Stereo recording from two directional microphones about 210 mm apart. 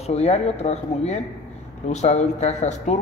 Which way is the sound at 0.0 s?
30° left (ahead or behind).